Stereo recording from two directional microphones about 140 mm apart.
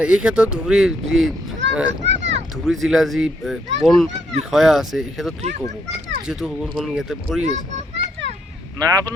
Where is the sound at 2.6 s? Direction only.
Centre (ahead or behind).